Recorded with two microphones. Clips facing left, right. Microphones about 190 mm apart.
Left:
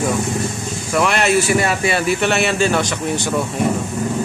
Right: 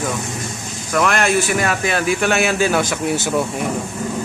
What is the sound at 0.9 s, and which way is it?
Speech, 5° left (ahead or behind).